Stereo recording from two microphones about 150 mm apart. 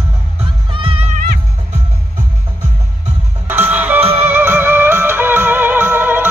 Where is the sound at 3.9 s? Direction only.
40° right (ahead or behind).